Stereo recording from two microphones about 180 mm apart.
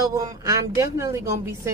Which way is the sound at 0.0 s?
20° right (ahead or behind).